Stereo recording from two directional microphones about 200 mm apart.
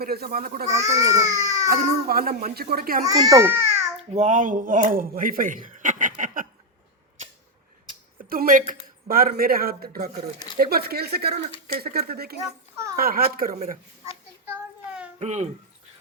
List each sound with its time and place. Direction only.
0.0 s a child's voice: 50° right (ahead or behind)
0.7 s speech: 15° right (ahead or behind)
1.7 s a child's voice: 50° right (ahead or behind)
3.1 s a child's voice: 15° right (ahead or behind)
4.1 s a man's voice: 35° right (ahead or behind)
8.3 s a man's voice: 45° right (ahead or behind)
15.2 s a child's voice: 35° right (ahead or behind)